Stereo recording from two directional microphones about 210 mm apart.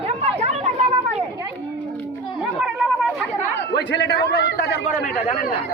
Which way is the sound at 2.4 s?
5° right (ahead or behind).